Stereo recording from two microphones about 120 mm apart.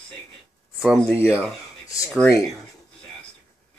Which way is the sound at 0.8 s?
Centre (ahead or behind).